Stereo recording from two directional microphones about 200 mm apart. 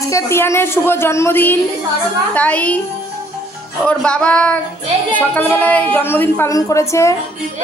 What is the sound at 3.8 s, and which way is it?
A woman's voice, 5° left (ahead or behind).